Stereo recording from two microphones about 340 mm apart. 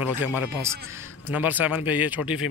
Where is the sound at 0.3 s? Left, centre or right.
Centre.